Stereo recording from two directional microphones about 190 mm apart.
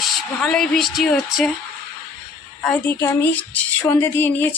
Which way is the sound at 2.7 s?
10° left (ahead or behind).